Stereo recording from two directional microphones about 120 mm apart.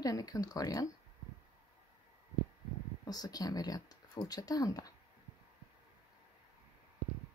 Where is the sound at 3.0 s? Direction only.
30° left (ahead or behind).